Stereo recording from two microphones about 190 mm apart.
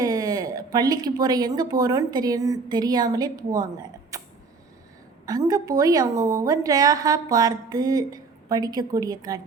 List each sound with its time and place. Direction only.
0.0 s speech: 20° right (ahead or behind)
5.2 s a woman's voice: 20° right (ahead or behind)